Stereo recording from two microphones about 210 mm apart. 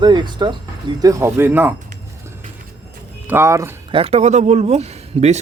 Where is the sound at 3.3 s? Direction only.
10° right (ahead or behind).